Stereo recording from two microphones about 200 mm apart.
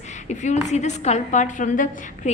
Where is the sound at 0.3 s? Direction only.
35° left (ahead or behind).